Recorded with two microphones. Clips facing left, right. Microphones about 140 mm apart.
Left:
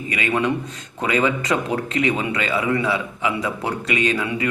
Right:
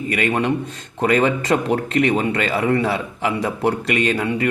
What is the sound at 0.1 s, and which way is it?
A man's voice, 50° right (ahead or behind).